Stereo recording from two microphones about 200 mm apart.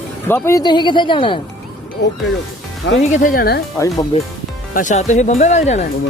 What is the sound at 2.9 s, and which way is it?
Music, 40° left (ahead or behind).